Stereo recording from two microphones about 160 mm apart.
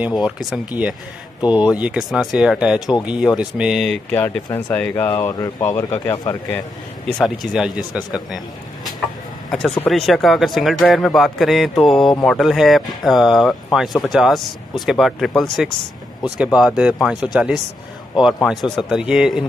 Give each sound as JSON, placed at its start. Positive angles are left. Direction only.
{"t": 0.0, "sound": "a man's voice", "side_deg": -5}
{"t": 7.2, "sound": "a man's voice", "side_deg": -5}
{"t": 9.5, "sound": "a man's voice", "side_deg": 5}